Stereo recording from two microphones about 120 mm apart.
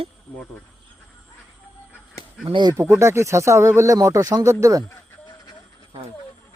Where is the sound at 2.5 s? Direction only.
40° right (ahead or behind).